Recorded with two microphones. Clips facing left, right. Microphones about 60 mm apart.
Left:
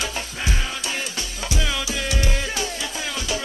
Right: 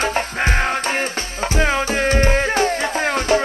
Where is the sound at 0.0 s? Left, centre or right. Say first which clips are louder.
Right 9 dB; right.